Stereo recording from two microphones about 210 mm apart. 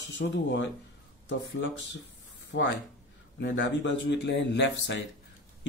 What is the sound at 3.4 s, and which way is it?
Speech, 60° left (ahead or behind).